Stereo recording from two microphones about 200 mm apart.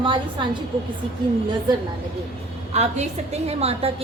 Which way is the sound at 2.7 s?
30° right (ahead or behind).